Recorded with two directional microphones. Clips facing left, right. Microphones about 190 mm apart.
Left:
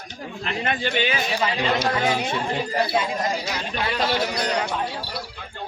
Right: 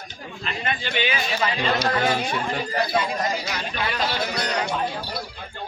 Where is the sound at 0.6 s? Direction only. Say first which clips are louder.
Left 2 dB; 50° left (ahead or behind).